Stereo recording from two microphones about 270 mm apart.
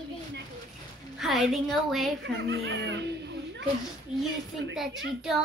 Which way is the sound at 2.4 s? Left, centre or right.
Right.